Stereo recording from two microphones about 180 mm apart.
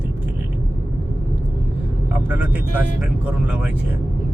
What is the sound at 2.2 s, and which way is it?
Speech, 10° right (ahead or behind).